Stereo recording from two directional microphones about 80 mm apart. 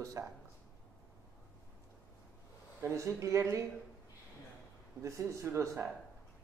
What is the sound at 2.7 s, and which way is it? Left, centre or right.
Speech, right.